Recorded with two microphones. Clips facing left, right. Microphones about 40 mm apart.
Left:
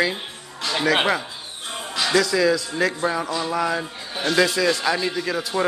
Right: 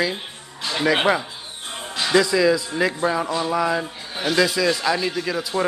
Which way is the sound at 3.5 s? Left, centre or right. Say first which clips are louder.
Right 2 dB; centre.